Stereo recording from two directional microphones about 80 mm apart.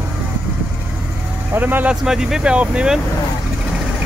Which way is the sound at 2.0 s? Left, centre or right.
Centre.